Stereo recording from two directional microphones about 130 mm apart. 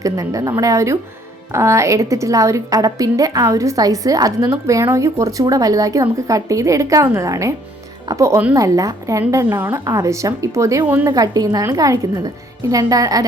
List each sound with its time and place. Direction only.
0.0 s a woman's voice: 25° right (ahead or behind)